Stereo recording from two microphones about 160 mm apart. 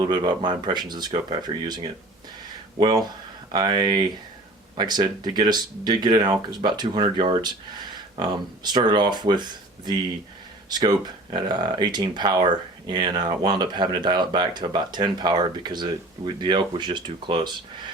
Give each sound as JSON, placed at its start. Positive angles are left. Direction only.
{"t": 0.0, "sound": "speech", "side_deg": -30}